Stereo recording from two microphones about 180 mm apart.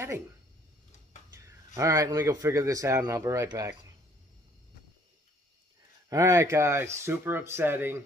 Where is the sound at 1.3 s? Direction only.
15° right (ahead or behind).